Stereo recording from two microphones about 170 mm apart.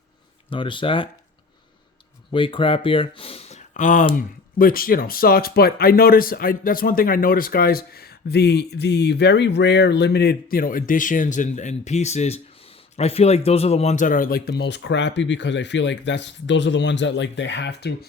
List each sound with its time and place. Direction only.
0.5 s speech: 30° left (ahead or behind)
2.3 s speech: 30° left (ahead or behind); by 17.9 s 80° left